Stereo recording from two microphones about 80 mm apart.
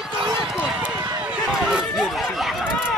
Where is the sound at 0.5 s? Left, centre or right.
Centre.